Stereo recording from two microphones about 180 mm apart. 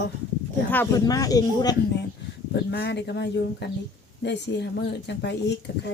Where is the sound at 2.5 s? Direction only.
65° left (ahead or behind).